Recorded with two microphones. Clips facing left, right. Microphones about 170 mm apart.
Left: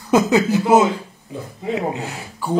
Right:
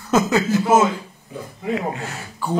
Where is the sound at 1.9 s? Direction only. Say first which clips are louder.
Left 2 dB; 15° left (ahead or behind).